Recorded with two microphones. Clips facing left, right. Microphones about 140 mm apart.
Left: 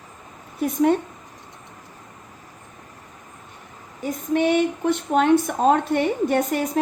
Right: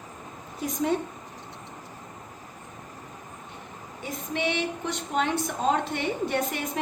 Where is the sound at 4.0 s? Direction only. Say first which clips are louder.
Left 9 dB; 45° left (ahead or behind).